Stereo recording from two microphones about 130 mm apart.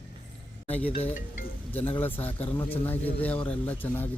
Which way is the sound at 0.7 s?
10° left (ahead or behind).